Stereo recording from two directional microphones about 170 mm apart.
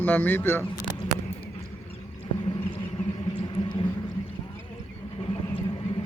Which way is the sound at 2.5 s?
30° left (ahead or behind).